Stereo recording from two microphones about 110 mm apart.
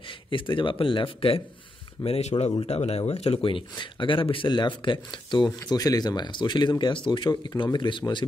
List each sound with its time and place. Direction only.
0.0 s a man's voice: 50° left (ahead or behind)
2.0 s speech: 70° left (ahead or behind)
3.4 s speech: 50° left (ahead or behind)
5.7 s a man's voice: 35° left (ahead or behind)